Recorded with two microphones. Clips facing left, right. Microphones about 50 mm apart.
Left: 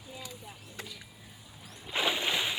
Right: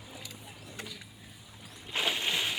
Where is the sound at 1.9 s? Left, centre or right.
Centre.